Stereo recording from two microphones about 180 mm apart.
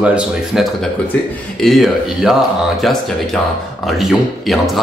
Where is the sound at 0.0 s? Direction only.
5° right (ahead or behind).